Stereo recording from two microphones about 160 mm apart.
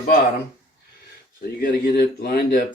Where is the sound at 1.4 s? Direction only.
75° left (ahead or behind).